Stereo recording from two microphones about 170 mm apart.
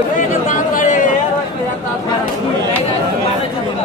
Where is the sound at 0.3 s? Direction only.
50° left (ahead or behind).